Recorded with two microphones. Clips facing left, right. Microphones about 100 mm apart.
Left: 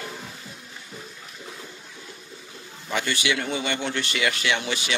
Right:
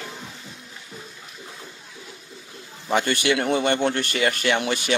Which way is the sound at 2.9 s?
50° right (ahead or behind).